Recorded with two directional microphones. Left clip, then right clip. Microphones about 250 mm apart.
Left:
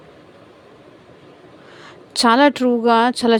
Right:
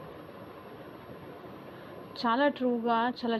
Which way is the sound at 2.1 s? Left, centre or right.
Left.